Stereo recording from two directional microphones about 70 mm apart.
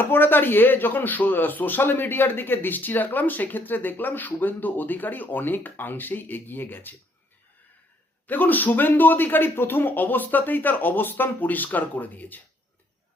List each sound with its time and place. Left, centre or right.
0.0 s speech: left
8.3 s speech: left